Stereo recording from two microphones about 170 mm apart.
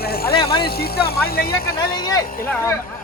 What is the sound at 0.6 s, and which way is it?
Speech, 65° left (ahead or behind).